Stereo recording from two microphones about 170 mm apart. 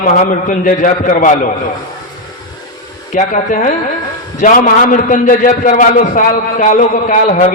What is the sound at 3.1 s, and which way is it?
A man's voice, 50° left (ahead or behind).